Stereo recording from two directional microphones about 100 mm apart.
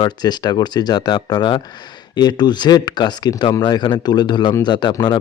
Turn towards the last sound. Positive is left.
turn(degrees=45)  # may be behind; listen again after turning